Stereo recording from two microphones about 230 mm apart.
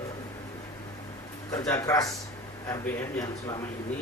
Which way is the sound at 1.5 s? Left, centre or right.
Centre.